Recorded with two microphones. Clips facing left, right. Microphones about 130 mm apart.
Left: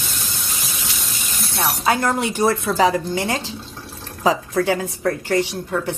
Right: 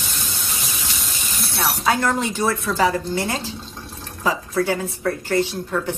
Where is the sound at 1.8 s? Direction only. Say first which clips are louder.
Left 1 dB; 10° left (ahead or behind).